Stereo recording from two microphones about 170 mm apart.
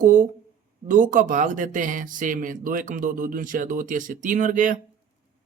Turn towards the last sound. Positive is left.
turn(degrees=-50)  # may be behind; listen again after turning